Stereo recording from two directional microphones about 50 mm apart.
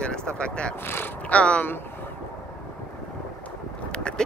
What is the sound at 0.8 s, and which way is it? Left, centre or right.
Speech, left.